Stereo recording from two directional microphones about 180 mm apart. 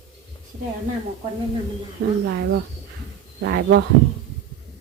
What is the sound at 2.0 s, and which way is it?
Speech, 65° right (ahead or behind).